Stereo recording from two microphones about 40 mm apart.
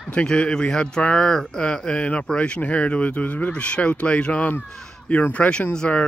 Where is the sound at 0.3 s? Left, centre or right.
Left.